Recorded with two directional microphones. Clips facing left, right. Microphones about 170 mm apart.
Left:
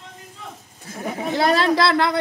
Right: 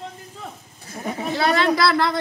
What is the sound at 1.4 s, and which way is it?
Speech, 35° left (ahead or behind).